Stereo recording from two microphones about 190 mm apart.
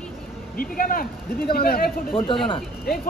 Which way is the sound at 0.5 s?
50° left (ahead or behind).